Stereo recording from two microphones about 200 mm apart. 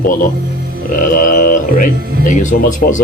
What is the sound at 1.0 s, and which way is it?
Speech, 40° left (ahead or behind).